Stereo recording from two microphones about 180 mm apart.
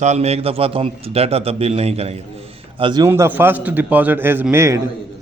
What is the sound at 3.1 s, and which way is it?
A man's voice, 10° right (ahead or behind).